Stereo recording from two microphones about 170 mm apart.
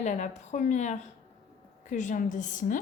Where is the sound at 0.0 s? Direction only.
45° left (ahead or behind).